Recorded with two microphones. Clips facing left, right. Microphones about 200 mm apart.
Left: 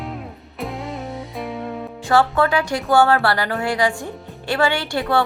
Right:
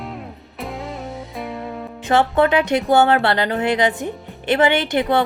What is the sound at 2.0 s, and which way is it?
Speech, 20° right (ahead or behind).